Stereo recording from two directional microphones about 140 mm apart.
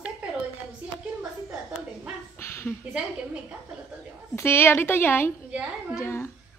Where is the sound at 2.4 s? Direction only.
15° left (ahead or behind).